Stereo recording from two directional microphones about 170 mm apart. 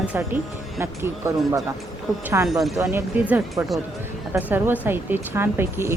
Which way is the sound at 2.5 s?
Centre (ahead or behind).